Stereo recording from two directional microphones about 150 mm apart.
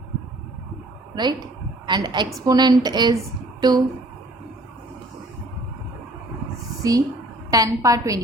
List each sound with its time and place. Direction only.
1.1 s a woman's voice: 30° right (ahead or behind)
7.5 s a woman's voice: 20° right (ahead or behind)